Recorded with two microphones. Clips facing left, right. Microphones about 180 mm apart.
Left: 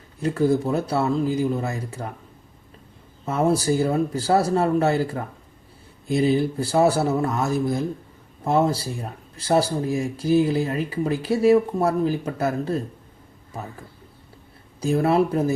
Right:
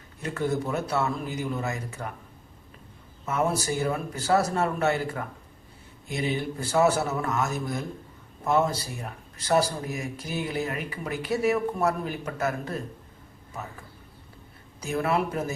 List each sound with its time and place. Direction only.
0.2 s speech: 30° left (ahead or behind)
3.2 s speech: 30° left (ahead or behind)
14.8 s speech: 30° left (ahead or behind)